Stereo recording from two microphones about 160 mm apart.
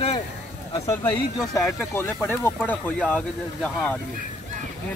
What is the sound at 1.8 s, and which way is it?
Speech, 10° left (ahead or behind).